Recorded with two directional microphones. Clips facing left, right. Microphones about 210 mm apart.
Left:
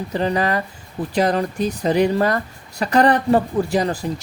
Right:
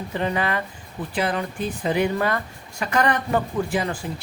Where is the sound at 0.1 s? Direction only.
35° left (ahead or behind).